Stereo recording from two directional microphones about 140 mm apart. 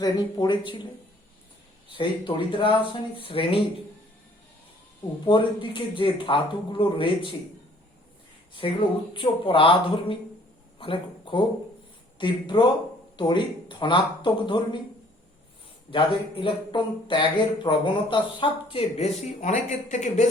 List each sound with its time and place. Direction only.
0.0 s speech: 30° left (ahead or behind)
2.0 s speech: 40° left (ahead or behind)
5.2 s speech: 35° left (ahead or behind)
9.1 s speech: 40° left (ahead or behind)
15.9 s speech: 35° left (ahead or behind); by 20.2 s 60° left (ahead or behind)